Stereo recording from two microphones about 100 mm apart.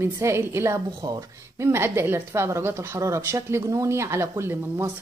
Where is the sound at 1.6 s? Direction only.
25° right (ahead or behind).